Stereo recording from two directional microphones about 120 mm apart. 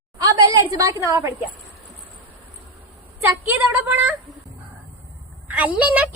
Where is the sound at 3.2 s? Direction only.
15° right (ahead or behind).